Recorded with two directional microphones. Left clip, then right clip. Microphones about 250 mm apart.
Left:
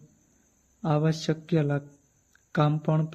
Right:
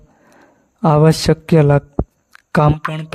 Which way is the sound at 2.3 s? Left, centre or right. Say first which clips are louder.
Right 12 dB; right.